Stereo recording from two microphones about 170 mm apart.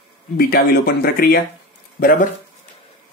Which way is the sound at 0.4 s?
60° left (ahead or behind).